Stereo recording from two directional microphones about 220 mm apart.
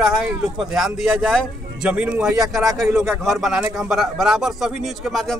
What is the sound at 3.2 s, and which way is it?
Speech, centre (ahead or behind).